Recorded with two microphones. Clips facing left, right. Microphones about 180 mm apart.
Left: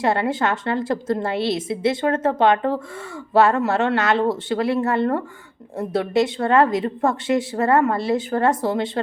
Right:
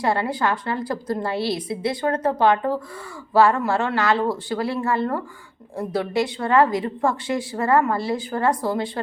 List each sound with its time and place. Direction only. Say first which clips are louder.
0.0 s a woman's voice: left 2 dB; 25° left (ahead or behind)